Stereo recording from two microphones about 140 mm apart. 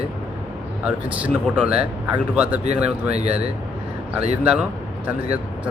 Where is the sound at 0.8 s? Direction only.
10° right (ahead or behind).